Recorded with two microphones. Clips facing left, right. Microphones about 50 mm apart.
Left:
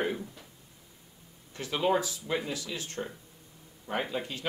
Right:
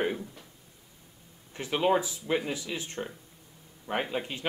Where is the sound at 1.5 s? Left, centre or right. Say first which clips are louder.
Right 2 dB; right.